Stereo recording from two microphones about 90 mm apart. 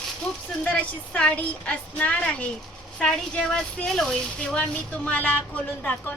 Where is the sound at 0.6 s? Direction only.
15° left (ahead or behind).